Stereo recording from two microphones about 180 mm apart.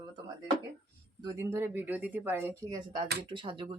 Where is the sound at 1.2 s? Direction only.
20° right (ahead or behind).